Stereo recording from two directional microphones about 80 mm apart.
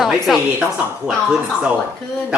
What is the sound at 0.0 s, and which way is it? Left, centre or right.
Speech, centre.